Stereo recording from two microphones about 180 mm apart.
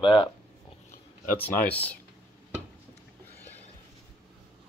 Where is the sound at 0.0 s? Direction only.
25° left (ahead or behind).